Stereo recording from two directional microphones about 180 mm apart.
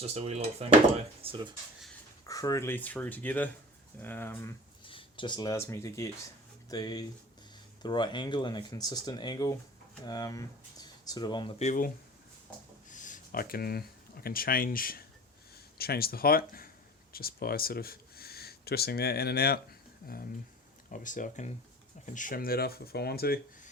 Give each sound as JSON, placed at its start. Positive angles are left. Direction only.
{"t": 0.0, "sound": "speech", "side_deg": -35}
{"t": 2.2, "sound": "speech", "side_deg": 20}
{"t": 4.9, "sound": "speech", "side_deg": 30}
{"t": 11.6, "sound": "speech", "side_deg": 45}
{"t": 12.9, "sound": "speech", "side_deg": 45}
{"t": 20.9, "sound": "speech", "side_deg": 45}